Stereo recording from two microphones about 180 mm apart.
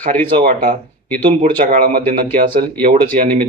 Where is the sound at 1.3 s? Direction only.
45° right (ahead or behind).